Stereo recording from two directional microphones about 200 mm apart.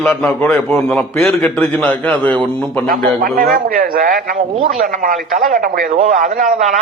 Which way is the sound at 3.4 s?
45° right (ahead or behind).